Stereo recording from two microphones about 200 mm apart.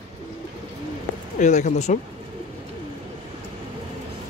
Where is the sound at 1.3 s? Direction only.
35° left (ahead or behind).